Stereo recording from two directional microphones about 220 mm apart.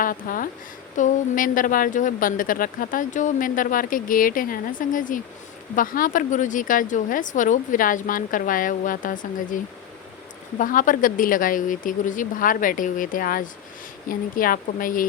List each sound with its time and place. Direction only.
0.0 s a woman's voice: 40° left (ahead or behind)
10.6 s a woman's voice: 35° left (ahead or behind)